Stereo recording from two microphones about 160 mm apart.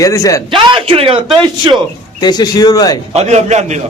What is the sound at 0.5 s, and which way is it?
Speech, 30° right (ahead or behind).